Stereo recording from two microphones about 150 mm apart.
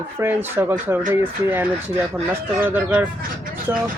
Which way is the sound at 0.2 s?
15° right (ahead or behind).